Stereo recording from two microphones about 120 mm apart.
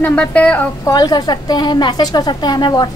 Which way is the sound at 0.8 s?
35° left (ahead or behind).